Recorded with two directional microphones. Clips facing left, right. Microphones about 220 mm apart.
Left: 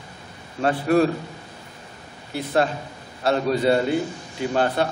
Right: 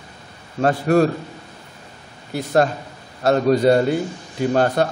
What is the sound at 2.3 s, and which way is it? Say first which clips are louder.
Speech: right 4 dB; 45° right (ahead or behind).